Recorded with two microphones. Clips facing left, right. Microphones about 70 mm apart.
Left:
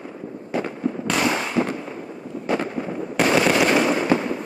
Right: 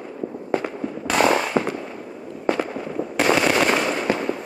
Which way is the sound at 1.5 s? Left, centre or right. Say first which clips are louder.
Even; right.